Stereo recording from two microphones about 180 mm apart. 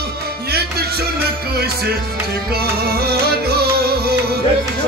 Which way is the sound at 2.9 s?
60° right (ahead or behind).